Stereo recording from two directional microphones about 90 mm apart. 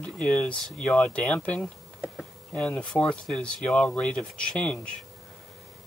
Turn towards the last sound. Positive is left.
turn(degrees=10)  # may be behind; listen again after turning